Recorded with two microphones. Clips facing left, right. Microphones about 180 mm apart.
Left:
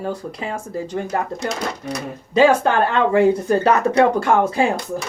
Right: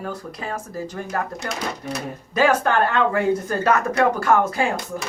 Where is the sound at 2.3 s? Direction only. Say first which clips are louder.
Left 4 dB; 25° left (ahead or behind).